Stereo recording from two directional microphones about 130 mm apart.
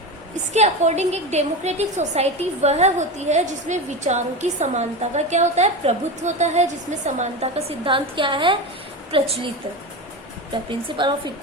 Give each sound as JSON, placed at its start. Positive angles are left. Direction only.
{"t": 0.5, "sound": "a woman's voice", "side_deg": -60}
{"t": 7.9, "sound": "a woman's voice", "side_deg": -40}
{"t": 10.7, "sound": "a woman's voice", "side_deg": -40}